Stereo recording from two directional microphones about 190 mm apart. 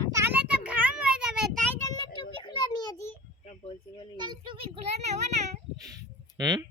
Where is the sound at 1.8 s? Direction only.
20° left (ahead or behind).